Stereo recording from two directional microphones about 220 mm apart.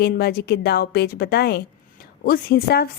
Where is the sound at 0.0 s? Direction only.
45° left (ahead or behind).